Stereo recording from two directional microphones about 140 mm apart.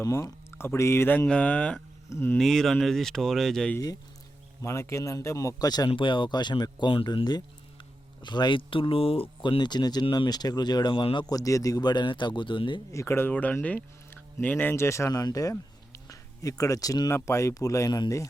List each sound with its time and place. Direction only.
0.0 s speech: 20° left (ahead or behind)
2.0 s speech: 20° left (ahead or behind)
2.4 s speech: centre (ahead or behind)
4.6 s speech: 20° left (ahead or behind)
12.9 s speech: 20° left (ahead or behind)